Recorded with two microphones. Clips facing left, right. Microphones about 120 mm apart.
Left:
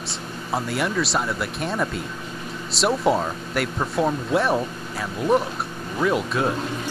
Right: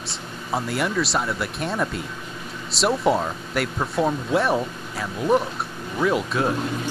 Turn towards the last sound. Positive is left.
turn(degrees=0)  # may be behind; listen again after turning